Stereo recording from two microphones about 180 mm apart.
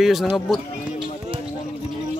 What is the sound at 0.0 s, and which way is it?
Speech, centre (ahead or behind).